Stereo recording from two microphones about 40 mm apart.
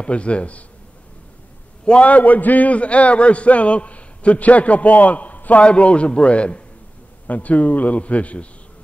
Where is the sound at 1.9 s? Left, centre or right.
Left.